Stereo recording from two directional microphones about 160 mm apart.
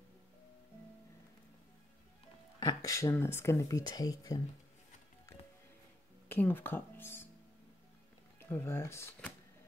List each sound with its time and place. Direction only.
2.6 s speech: 20° left (ahead or behind)
6.2 s speech: 15° left (ahead or behind)
8.4 s speech: 15° left (ahead or behind)